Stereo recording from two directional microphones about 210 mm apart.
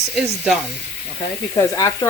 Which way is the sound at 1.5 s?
15° left (ahead or behind).